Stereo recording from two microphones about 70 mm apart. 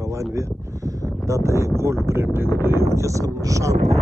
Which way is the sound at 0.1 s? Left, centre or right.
Right.